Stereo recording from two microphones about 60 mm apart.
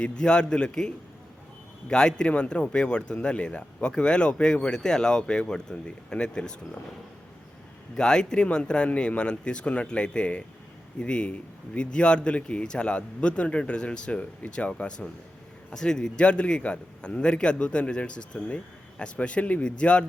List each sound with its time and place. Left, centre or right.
0.0 s speech: centre
7.9 s speech: centre